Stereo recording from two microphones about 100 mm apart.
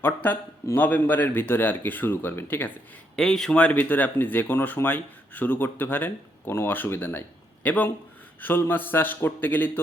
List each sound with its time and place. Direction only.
0.0 s a man's voice: 15° left (ahead or behind)
3.2 s speech: 5° left (ahead or behind)